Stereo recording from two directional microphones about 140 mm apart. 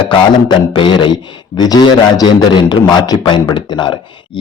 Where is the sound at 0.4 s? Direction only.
30° left (ahead or behind).